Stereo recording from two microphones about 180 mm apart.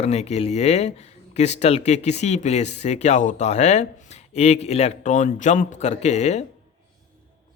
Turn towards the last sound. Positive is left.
turn(degrees=40)  # may be behind; listen again after turning